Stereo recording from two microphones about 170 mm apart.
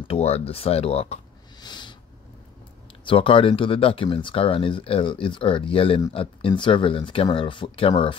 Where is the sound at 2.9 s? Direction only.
30° left (ahead or behind).